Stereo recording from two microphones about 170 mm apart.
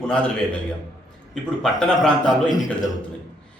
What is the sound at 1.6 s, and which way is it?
A man's voice, centre (ahead or behind).